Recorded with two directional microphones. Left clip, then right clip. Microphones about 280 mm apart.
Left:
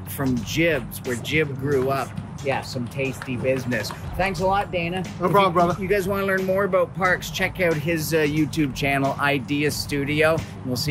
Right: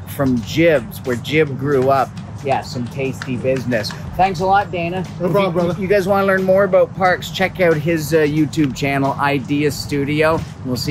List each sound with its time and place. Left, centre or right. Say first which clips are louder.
0.2 s speech: right 7 dB; centre
5.2 s speech: right 1 dB; centre
5.8 s speech: right 8 dB; centre